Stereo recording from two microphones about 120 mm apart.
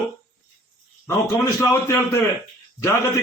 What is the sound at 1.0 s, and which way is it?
A man's voice, 25° left (ahead or behind).